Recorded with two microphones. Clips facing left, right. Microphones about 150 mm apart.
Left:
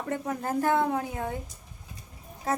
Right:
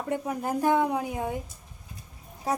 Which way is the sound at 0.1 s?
15° right (ahead or behind).